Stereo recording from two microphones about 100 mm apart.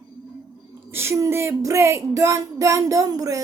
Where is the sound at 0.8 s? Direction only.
25° right (ahead or behind).